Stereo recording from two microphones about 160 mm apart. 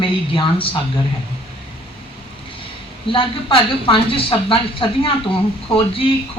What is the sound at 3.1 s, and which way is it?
Speech, 35° left (ahead or behind).